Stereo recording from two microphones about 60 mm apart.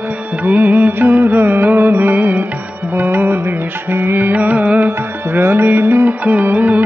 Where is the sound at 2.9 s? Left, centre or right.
Right.